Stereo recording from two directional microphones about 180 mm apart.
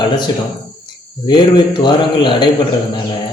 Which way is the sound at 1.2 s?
25° left (ahead or behind).